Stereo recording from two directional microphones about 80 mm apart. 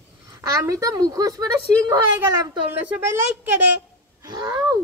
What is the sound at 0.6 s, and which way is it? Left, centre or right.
Speech, right.